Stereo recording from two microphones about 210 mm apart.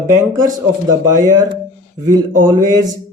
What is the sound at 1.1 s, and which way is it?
Speech, 20° right (ahead or behind).